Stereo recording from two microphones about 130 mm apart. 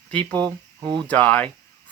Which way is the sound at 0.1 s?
10° left (ahead or behind).